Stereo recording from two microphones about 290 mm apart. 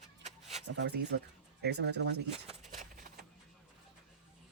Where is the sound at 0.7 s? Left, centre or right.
Right.